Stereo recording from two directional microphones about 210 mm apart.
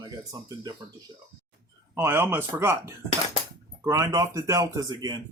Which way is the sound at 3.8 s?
15° right (ahead or behind).